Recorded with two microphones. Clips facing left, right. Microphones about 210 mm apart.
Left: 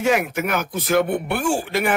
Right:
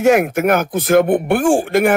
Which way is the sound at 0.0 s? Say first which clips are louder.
Right 7 dB; 50° right (ahead or behind).